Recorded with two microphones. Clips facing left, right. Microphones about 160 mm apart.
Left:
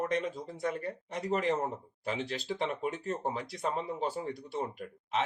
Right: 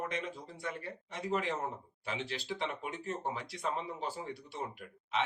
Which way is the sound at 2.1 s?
40° left (ahead or behind).